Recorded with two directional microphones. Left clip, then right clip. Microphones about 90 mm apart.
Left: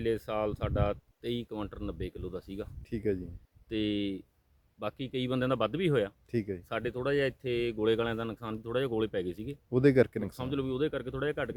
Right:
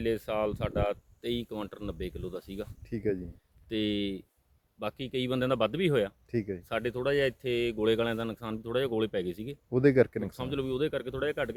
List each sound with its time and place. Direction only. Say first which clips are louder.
0.0 s speech: right 1 dB; 20° left (ahead or behind)
2.9 s speech: right 1 dB; 45° left (ahead or behind)
3.7 s speech: right 1 dB; 20° left (ahead or behind)
6.3 s speech: even; 45° left (ahead or behind)
6.7 s speech: right 3 dB; 15° left (ahead or behind)
9.6 s speech: right 1 dB; 40° left (ahead or behind)
10.4 s speech: right 1 dB; 15° left (ahead or behind)